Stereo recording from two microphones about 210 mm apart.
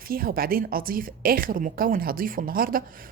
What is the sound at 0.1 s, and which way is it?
A woman's voice, 45° right (ahead or behind).